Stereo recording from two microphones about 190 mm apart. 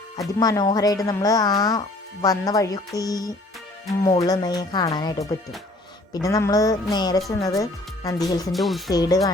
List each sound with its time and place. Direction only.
0.2 s speech: 20° left (ahead or behind)
8.5 s speech: centre (ahead or behind)
8.9 s speech: 20° left (ahead or behind)